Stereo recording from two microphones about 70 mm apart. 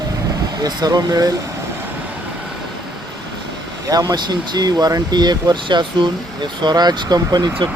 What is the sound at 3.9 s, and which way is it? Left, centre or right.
Speech, right.